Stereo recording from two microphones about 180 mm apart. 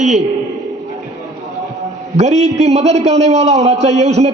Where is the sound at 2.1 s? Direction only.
40° right (ahead or behind).